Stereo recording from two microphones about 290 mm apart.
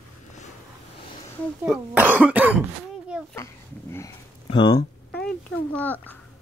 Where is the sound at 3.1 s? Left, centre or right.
Centre.